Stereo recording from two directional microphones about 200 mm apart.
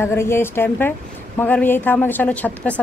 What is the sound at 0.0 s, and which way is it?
A woman's voice, 10° left (ahead or behind).